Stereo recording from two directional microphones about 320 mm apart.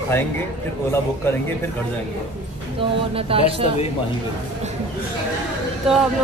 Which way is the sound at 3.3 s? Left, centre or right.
Centre.